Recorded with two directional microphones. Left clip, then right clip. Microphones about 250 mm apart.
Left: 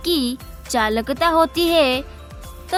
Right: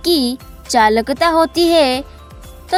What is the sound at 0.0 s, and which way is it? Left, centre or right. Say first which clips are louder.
Speech: right 5 dB; centre.